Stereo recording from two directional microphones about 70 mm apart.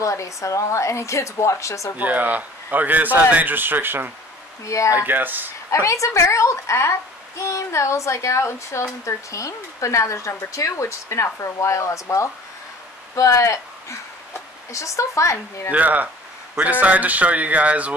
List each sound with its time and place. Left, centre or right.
0.0 s speech: left
2.0 s speech: right
4.6 s speech: left
4.9 s speech: right
5.7 s speech: left
15.7 s speech: right